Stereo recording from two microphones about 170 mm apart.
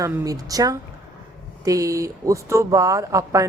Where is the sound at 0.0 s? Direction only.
20° right (ahead or behind).